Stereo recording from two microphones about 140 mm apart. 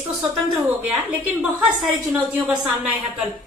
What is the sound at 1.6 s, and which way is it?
A woman's voice, 5° right (ahead or behind).